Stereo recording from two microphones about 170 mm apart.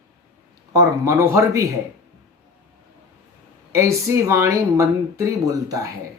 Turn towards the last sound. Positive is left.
turn(degrees=-20)  # may be behind; listen again after turning